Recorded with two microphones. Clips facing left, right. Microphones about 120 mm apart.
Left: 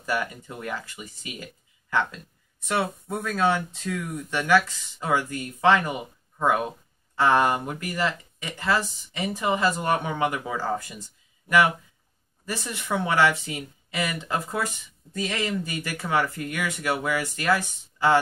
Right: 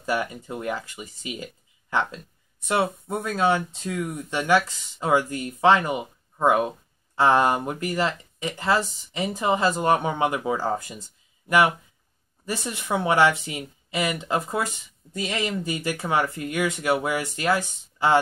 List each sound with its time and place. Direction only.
0.0 s speech: 25° right (ahead or behind)